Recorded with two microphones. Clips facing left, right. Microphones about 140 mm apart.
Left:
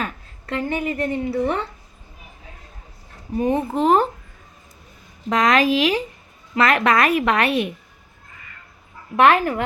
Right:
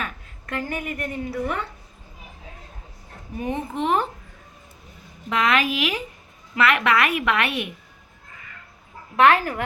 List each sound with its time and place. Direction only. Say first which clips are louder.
0.0 s a woman's voice: left 4 dB; 30° left (ahead or behind)
3.3 s a woman's voice: left 7 dB; 35° left (ahead or behind)
5.3 s a woman's voice: left 5 dB; 40° left (ahead or behind)
9.2 s speech: left 2 dB; 25° left (ahead or behind)